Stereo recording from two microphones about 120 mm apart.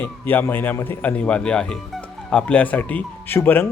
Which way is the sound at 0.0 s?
15° left (ahead or behind).